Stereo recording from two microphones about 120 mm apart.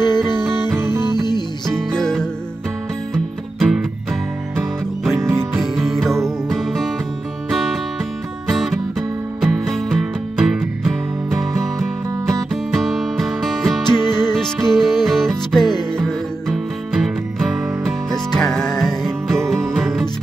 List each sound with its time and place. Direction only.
0.0 s music: 35° left (ahead or behind)
0.7 s music: 20° right (ahead or behind)
1.0 s music: 35° left (ahead or behind)
1.8 s music: 5° left (ahead or behind)
5.2 s music: 25° right (ahead or behind)
5.6 s music: centre (ahead or behind)
8.5 s music: 5° right (ahead or behind)